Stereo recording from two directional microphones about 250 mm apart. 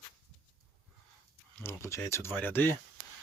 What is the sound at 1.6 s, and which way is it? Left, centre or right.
Speech, centre.